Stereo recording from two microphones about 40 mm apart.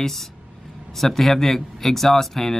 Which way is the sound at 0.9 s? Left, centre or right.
Centre.